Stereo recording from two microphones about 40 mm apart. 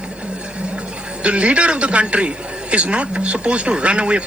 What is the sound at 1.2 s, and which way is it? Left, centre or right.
Speech, right.